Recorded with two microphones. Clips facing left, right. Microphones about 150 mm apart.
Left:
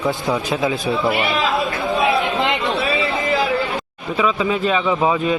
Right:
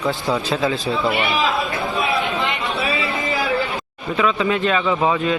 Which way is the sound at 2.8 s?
25° left (ahead or behind).